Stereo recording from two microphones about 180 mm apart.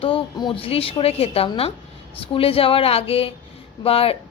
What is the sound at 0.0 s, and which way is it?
A woman's voice, 30° left (ahead or behind).